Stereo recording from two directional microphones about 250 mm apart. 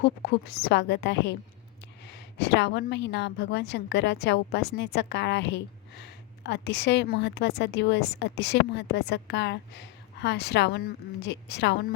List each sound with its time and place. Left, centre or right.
0.0 s a woman's voice: left